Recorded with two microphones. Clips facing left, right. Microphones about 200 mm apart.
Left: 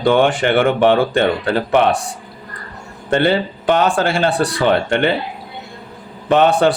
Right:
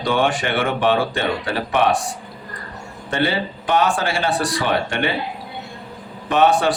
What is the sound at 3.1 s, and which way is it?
Speech, 60° left (ahead or behind).